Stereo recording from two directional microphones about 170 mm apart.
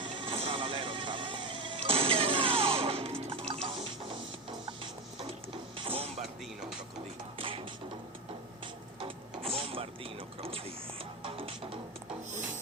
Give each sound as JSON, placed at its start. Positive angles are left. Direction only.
{"t": 0.0, "sound": "music", "side_deg": -30}
{"t": 5.7, "sound": "music", "side_deg": -30}
{"t": 6.2, "sound": "music", "side_deg": 0}
{"t": 7.3, "sound": "music", "side_deg": -30}
{"t": 8.6, "sound": "a sound", "side_deg": -30}
{"t": 9.4, "sound": "vehicle", "side_deg": -35}
{"t": 11.2, "sound": "music", "side_deg": -35}